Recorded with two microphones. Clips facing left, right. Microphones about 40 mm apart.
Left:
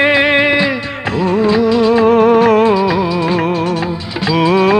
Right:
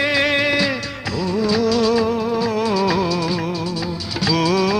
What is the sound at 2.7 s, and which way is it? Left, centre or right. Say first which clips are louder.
Music: left 5 dB; left.